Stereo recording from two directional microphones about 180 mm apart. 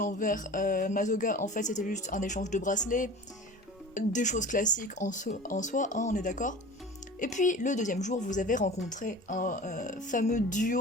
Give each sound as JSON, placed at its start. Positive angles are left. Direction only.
{"t": 0.0, "sound": "speech", "side_deg": 45}